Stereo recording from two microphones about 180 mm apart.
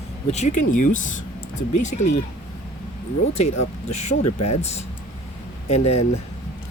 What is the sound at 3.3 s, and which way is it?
Speech, 40° left (ahead or behind).